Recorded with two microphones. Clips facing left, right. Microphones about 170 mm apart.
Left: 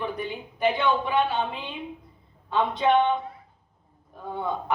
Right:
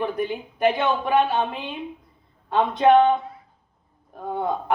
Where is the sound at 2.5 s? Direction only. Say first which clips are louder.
Right 5 dB; 50° right (ahead or behind).